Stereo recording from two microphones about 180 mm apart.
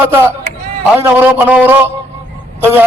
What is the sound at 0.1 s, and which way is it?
A man's voice, 10° right (ahead or behind).